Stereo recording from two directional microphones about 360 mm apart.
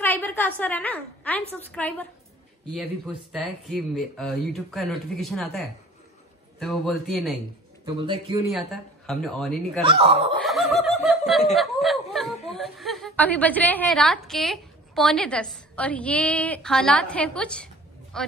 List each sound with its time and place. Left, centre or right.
0.0 s a woman's voice: centre
3.3 s a woman's voice: centre
7.8 s speech: centre
8.5 s a woman's voice: centre
9.8 s speech: centre
10.4 s snicker: centre
11.5 s a woman's voice: centre